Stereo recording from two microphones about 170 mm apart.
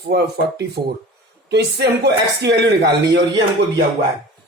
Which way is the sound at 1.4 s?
75° right (ahead or behind).